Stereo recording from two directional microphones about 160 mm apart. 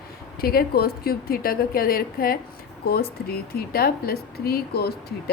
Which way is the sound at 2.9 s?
75° left (ahead or behind).